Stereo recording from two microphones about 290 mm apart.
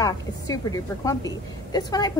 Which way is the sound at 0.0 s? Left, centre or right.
Centre.